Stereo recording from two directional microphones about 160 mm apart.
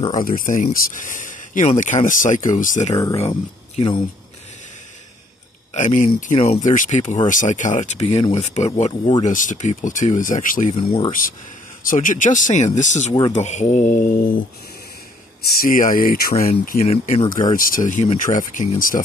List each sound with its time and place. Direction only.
0.1 s speech: 55° left (ahead or behind)
2.9 s speech: 20° left (ahead or behind)
5.8 s speech: 50° left (ahead or behind)
6.3 s speech: 40° left (ahead or behind)
9.2 s speech: 55° left (ahead or behind)
10.7 s speech: 35° left (ahead or behind)
11.1 s speech: 60° left (ahead or behind)
15.6 s speech: 60° left (ahead or behind)
16.8 s speech: 45° left (ahead or behind)